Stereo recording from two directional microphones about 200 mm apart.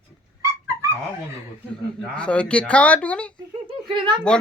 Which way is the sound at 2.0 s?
5° left (ahead or behind).